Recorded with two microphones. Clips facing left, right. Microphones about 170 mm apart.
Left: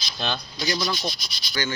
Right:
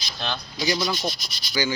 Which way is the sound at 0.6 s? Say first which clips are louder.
Right 2 dB; 15° right (ahead or behind).